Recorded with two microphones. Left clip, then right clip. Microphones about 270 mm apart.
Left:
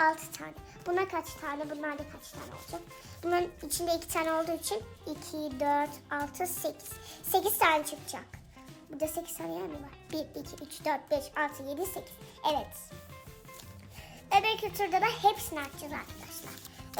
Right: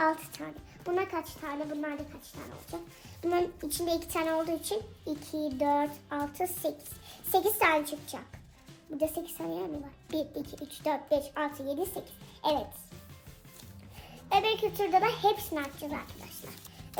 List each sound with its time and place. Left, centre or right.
0.0 s speech: centre
3.2 s a child's voice: centre
14.3 s a child's voice: centre